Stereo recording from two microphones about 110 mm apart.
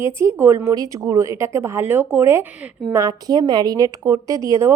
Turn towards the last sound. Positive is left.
turn(degrees=-25)  # may be behind; listen again after turning